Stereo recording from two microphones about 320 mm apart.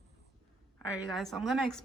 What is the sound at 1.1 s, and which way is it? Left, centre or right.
Speech, centre.